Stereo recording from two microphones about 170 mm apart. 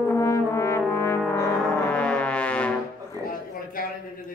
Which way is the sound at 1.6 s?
5° left (ahead or behind).